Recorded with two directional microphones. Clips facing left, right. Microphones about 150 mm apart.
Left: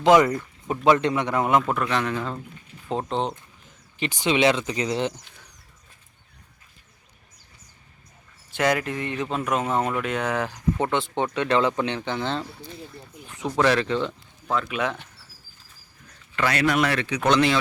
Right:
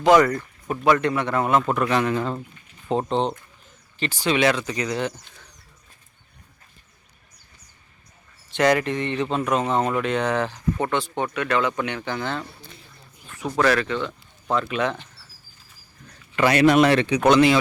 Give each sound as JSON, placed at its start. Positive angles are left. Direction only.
{"t": 0.0, "sound": "speech", "side_deg": 20}
{"t": 1.9, "sound": "speech", "side_deg": -5}
{"t": 4.0, "sound": "speech", "side_deg": 20}
{"t": 8.4, "sound": "speech", "side_deg": 5}
{"t": 10.9, "sound": "speech", "side_deg": 20}
{"t": 14.5, "sound": "speech", "side_deg": 5}
{"t": 16.3, "sound": "speech", "side_deg": -20}
{"t": 17.2, "sound": "speech", "side_deg": -5}